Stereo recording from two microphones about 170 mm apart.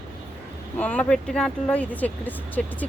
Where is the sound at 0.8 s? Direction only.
10° left (ahead or behind).